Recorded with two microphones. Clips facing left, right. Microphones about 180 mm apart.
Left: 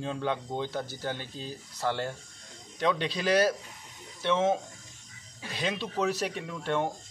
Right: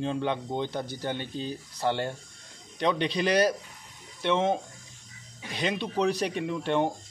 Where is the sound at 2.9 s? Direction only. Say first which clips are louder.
Right 1 dB; 5° left (ahead or behind).